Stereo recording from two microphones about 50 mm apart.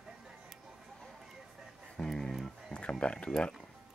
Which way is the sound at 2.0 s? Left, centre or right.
Centre.